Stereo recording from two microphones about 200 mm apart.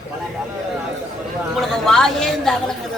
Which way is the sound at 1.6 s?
Centre (ahead or behind).